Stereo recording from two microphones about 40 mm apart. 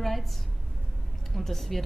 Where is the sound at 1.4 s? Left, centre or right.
Centre.